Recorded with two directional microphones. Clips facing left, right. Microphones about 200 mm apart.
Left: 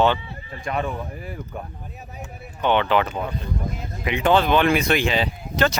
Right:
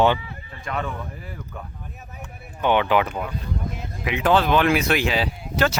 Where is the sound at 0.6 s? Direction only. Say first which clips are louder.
Left 3 dB; 20° left (ahead or behind).